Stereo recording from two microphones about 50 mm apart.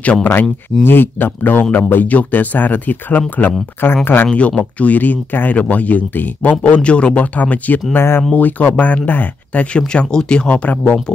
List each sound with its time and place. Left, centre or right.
0.2 s speech: left
4.3 s speech: left